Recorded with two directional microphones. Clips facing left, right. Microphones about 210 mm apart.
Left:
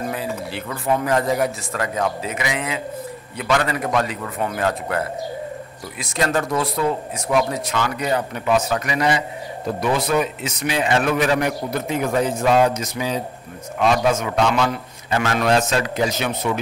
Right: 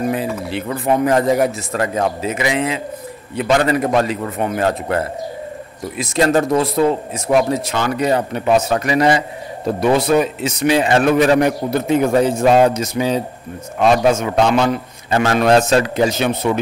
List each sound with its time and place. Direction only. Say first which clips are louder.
0.1 s a man's voice: right 6 dB; 20° right (ahead or behind)